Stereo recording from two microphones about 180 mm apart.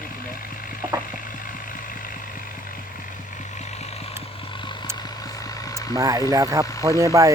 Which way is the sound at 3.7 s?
35° left (ahead or behind).